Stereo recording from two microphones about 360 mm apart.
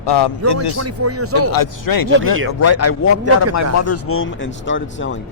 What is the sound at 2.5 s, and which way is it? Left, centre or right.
Speech, left.